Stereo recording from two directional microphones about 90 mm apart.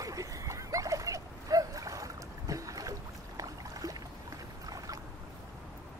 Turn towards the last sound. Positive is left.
turn(degrees=-40)  # may be behind; listen again after turning